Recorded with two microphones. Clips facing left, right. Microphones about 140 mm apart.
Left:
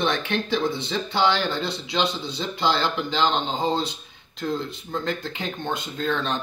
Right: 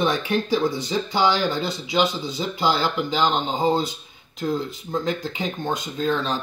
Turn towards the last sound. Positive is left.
turn(degrees=-5)  # may be behind; listen again after turning